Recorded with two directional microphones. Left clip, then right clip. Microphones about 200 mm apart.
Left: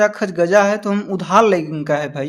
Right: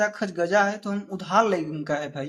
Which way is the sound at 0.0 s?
35° left (ahead or behind).